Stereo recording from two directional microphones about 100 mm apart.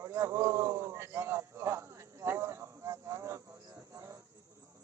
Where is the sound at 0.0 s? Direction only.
30° right (ahead or behind).